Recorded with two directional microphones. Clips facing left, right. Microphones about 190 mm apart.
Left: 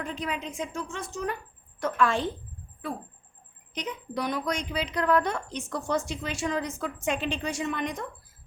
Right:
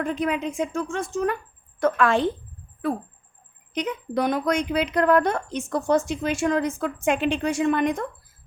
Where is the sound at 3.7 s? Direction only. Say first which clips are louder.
Right 7 dB; 55° right (ahead or behind).